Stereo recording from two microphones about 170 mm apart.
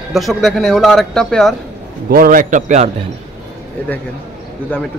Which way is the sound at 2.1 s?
55° right (ahead or behind).